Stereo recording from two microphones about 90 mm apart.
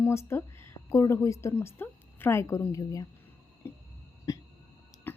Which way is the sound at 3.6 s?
30° left (ahead or behind).